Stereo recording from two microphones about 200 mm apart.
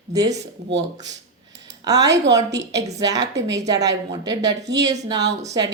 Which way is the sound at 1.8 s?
20° right (ahead or behind).